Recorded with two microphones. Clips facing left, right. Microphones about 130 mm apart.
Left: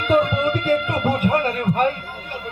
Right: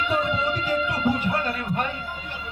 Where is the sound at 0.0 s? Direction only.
55° left (ahead or behind).